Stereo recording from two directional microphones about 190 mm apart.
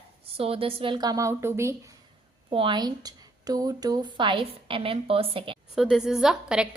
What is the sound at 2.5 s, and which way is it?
A woman's voice, 25° right (ahead or behind).